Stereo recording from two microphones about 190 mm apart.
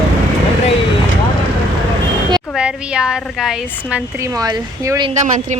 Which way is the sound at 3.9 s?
15° right (ahead or behind).